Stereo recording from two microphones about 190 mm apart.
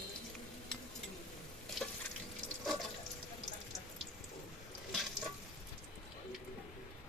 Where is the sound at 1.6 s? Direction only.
Centre (ahead or behind).